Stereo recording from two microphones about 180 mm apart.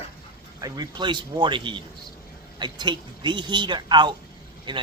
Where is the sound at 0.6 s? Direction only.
20° right (ahead or behind).